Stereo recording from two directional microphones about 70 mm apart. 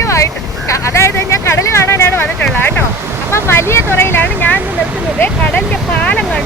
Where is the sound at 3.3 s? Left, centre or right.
Left.